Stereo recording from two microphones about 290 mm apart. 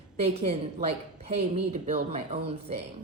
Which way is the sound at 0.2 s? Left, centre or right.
Right.